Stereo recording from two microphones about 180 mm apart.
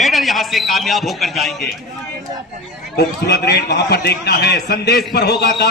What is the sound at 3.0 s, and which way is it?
A man's voice, 65° left (ahead or behind).